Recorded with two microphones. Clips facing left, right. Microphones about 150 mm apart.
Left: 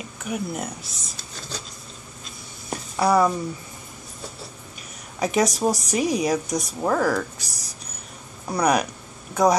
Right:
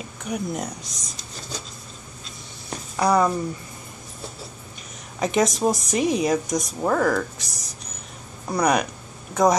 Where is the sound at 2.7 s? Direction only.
5° left (ahead or behind).